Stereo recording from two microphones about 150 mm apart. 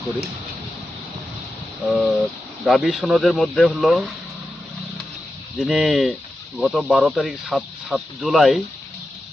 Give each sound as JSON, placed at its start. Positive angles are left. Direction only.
{"t": 1.9, "sound": "speech", "side_deg": 0}
{"t": 5.5, "sound": "speech", "side_deg": 0}